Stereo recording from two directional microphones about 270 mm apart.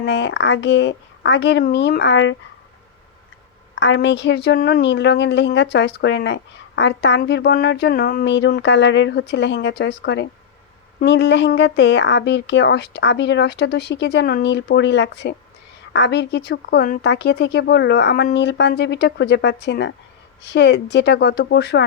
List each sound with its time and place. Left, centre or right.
0.0 s speech: left
3.8 s speech: left